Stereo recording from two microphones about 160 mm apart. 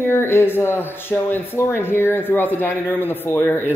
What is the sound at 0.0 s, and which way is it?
A man's voice, 15° left (ahead or behind).